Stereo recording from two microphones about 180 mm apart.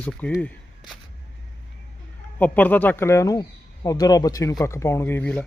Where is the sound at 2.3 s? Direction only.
10° left (ahead or behind).